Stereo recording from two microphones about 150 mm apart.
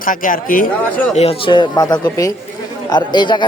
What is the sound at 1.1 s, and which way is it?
Speech, 40° left (ahead or behind).